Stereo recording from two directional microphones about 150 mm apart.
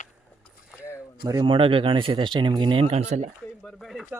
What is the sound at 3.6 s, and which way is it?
Speech, centre (ahead or behind).